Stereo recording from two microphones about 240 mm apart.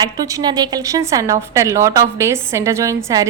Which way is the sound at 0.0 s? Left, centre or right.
Centre.